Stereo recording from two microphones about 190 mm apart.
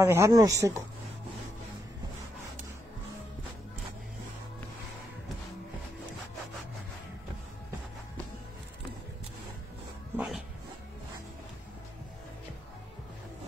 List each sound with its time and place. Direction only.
0.0 s speech: 15° right (ahead or behind)
10.1 s dog: 5° right (ahead or behind)